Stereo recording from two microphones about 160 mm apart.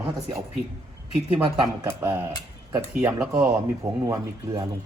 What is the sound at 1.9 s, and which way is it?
Speech, 15° right (ahead or behind).